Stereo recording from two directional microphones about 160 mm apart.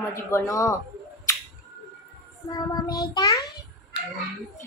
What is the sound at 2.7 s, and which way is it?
Speech, 25° left (ahead or behind).